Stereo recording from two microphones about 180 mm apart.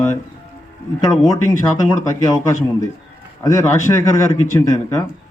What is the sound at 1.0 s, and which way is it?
Speech, 25° left (ahead or behind).